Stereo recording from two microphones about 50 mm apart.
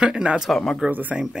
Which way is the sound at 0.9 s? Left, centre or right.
Right.